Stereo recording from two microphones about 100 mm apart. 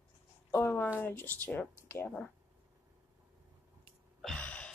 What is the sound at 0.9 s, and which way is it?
Speech, 15° left (ahead or behind).